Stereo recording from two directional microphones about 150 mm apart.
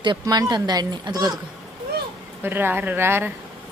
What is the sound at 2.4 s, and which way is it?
Speech, 15° right (ahead or behind).